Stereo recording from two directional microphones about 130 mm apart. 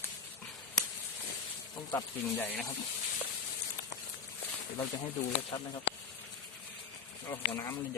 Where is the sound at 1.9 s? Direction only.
20° left (ahead or behind).